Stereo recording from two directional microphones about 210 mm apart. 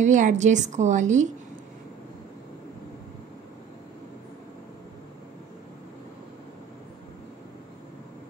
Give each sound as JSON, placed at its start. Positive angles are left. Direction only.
{"t": 0.0, "sound": "a woman's voice", "side_deg": -35}